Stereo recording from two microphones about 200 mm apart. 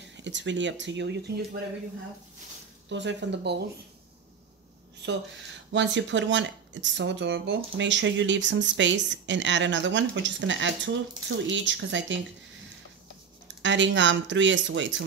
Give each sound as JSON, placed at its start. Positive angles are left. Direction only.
{"t": 0.1, "sound": "speech", "side_deg": -65}
{"t": 2.9, "sound": "speech", "side_deg": -65}
{"t": 5.0, "sound": "speech", "side_deg": -60}
{"t": 13.6, "sound": "speech", "side_deg": -65}